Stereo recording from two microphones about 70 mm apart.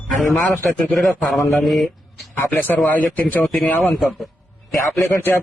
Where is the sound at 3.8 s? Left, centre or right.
Centre.